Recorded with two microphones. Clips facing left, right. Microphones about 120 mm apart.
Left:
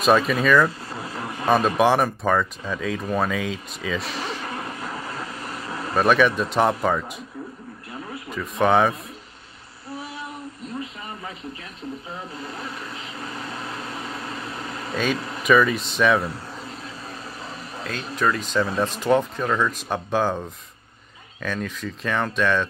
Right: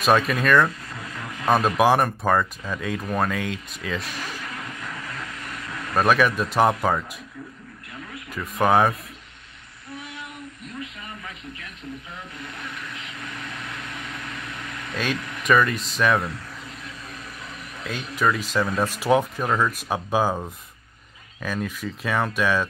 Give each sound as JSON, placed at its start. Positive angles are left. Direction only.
{"t": 0.3, "sound": "speech", "side_deg": 0}
{"t": 0.7, "sound": "vehicle", "side_deg": 30}
{"t": 1.8, "sound": "speech", "side_deg": 0}
{"t": 4.2, "sound": "vehicle", "side_deg": 30}
{"t": 5.9, "sound": "speech", "side_deg": 0}
{"t": 7.9, "sound": "a sound", "side_deg": 30}
{"t": 8.3, "sound": "speech", "side_deg": 0}
{"t": 9.8, "sound": "a sound", "side_deg": 30}
{"t": 12.1, "sound": "vehicle", "side_deg": 30}
{"t": 15.1, "sound": "a sound", "side_deg": 30}
{"t": 15.4, "sound": "speech", "side_deg": 0}
{"t": 16.2, "sound": "air conditioning", "side_deg": 30}
{"t": 18.1, "sound": "speech", "side_deg": -5}